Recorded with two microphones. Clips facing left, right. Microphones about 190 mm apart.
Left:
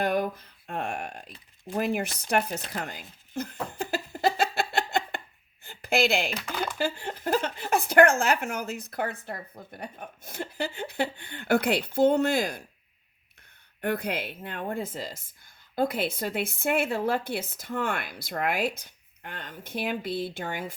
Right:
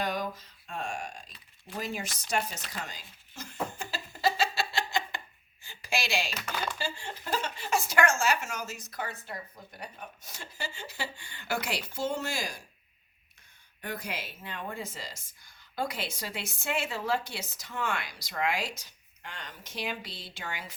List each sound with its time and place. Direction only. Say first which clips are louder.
0.0 s speech: left 6 dB; 55° left (ahead or behind)
3.9 s a sound: left 4 dB; 55° left (ahead or behind)
6.3 s speech: left 3 dB; 15° left (ahead or behind)
6.7 s speech: left 7 dB; 60° left (ahead or behind)
13.8 s a woman's voice: left 9 dB; 60° left (ahead or behind)